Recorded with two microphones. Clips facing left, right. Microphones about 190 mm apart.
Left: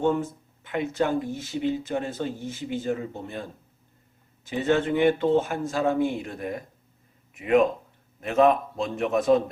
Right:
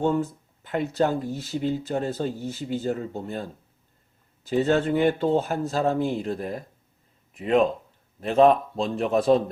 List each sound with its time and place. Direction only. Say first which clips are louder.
0.2 s speech: right 3 dB; 35° right (ahead or behind)
4.4 s speech: right 2 dB; 35° right (ahead or behind)